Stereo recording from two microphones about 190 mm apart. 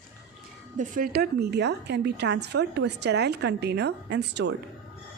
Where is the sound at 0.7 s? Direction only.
45° right (ahead or behind); by 4.5 s 65° right (ahead or behind).